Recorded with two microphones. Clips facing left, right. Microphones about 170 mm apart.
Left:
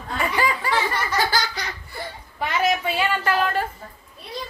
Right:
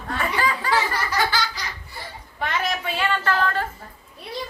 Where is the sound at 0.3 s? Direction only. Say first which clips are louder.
Left 2 dB; 15° left (ahead or behind).